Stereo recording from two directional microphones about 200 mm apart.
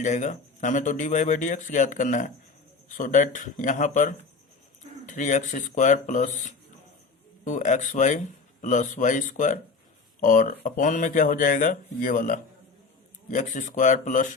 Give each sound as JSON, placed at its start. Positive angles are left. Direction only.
{"t": 0.0, "sound": "speech", "side_deg": 35}